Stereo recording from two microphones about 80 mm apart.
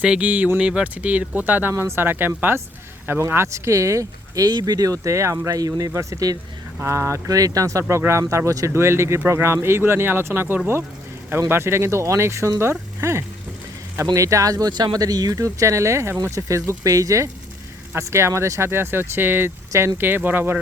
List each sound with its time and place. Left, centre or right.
0.0 s speech: centre; by 6.3 s right
6.8 s speech: right
7.3 s speech: right
13.0 s a sound: right
13.9 s speech: right
14.7 s speech: right